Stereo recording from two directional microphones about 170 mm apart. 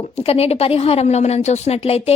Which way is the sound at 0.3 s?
35° left (ahead or behind).